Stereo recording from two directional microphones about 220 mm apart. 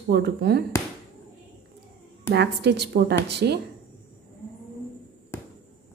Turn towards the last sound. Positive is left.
turn(degrees=10)  # may be behind; listen again after turning